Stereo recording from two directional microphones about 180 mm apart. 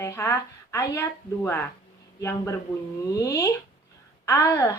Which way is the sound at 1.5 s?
15° left (ahead or behind).